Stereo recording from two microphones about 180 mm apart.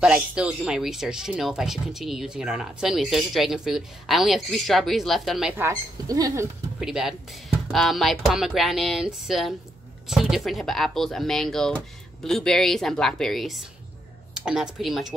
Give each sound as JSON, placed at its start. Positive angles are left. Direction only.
{"t": 0.0, "sound": "speech", "side_deg": -5}
{"t": 5.6, "sound": "speech", "side_deg": -20}
{"t": 6.8, "sound": "speech", "side_deg": -5}